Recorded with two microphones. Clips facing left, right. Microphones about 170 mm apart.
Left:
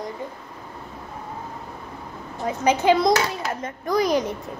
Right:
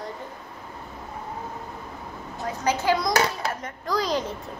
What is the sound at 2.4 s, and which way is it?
A child's voice, 20° left (ahead or behind).